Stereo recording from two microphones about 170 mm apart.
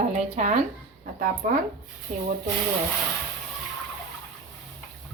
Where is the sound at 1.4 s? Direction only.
60° right (ahead or behind).